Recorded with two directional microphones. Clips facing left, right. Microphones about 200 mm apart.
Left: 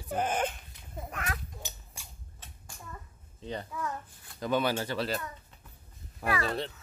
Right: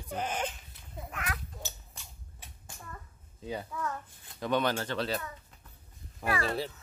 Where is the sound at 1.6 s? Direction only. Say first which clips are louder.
Right 1 dB; 10° left (ahead or behind).